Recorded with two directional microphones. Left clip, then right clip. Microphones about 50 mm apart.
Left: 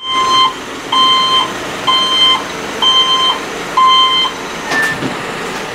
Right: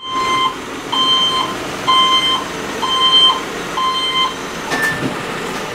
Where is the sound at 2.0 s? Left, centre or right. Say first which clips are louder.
Left 3 dB; left.